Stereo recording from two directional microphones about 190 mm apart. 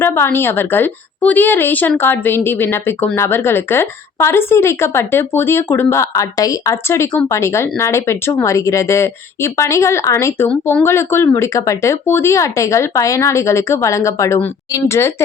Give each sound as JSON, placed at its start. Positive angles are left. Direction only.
{"t": 0.0, "sound": "speech", "side_deg": 10}